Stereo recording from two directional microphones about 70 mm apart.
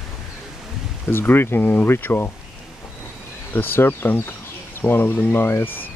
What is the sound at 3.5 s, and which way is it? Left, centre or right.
Speech, left.